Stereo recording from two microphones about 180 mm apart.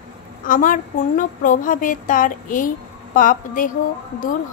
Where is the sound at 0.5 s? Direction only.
45° left (ahead or behind).